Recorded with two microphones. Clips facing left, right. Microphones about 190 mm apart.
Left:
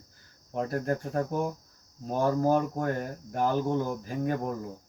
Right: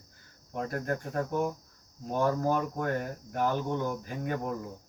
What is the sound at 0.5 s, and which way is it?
Speech, 30° left (ahead or behind).